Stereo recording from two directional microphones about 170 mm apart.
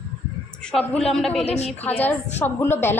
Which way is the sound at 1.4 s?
40° left (ahead or behind).